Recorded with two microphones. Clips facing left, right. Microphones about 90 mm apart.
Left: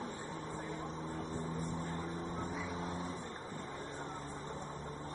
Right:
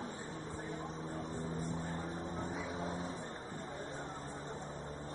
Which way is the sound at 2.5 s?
55° right (ahead or behind).